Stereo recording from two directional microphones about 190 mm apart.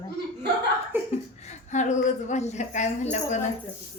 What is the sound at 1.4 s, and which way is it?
A woman's voice, 40° left (ahead or behind).